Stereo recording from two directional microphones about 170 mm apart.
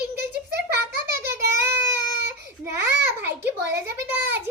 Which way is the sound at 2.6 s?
15° right (ahead or behind).